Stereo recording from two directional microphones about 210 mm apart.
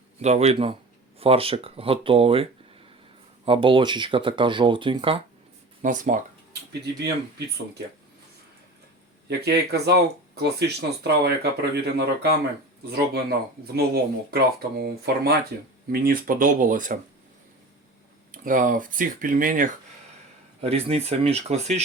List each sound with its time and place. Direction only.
0.2 s speech: 30° right (ahead or behind)
5.8 s speech: 35° right (ahead or behind)
9.3 s speech: 50° right (ahead or behind)
13.7 s speech: 45° right (ahead or behind)
18.3 s speech: 40° right (ahead or behind)
20.6 s speech: 30° right (ahead or behind)